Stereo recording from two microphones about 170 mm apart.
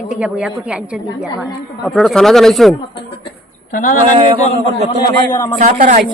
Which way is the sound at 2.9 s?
30° left (ahead or behind).